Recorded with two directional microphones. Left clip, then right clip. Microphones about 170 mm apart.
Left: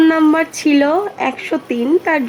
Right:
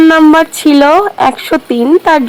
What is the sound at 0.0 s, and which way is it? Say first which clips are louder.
A woman's voice: right 7 dB; 35° right (ahead or behind).